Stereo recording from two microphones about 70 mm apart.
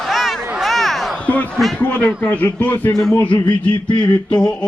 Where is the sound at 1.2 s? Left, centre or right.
Left.